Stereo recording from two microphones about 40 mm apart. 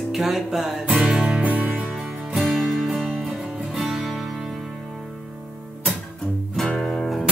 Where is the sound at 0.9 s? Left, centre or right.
Right.